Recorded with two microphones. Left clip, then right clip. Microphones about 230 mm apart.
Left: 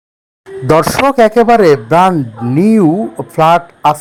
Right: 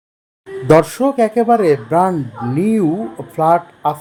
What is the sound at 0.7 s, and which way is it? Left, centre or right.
Speech, left.